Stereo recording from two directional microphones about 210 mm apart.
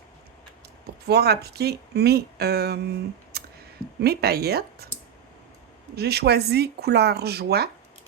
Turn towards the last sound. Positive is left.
turn(degrees=-50)  # may be behind; listen again after turning